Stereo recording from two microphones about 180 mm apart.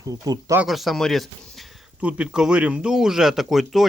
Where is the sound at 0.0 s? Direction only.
20° right (ahead or behind).